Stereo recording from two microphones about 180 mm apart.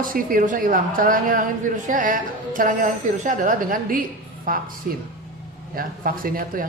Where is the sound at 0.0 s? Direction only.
50° right (ahead or behind).